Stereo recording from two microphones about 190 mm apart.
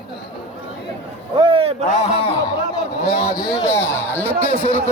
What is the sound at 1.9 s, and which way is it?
Speech, 35° left (ahead or behind).